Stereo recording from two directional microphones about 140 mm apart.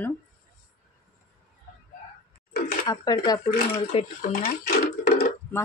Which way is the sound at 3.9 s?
45° left (ahead or behind).